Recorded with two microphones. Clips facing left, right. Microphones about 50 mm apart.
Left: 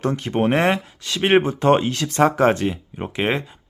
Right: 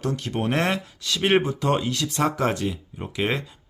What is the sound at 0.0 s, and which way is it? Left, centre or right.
Speech, left.